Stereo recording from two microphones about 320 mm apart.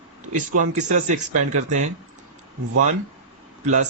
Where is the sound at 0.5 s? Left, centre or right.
Right.